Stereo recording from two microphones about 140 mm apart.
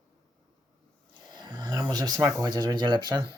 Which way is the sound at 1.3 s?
30° right (ahead or behind).